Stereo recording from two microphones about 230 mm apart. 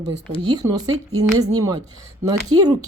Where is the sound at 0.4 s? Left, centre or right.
Centre.